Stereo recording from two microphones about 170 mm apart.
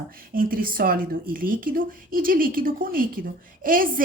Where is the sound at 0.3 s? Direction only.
55° right (ahead or behind).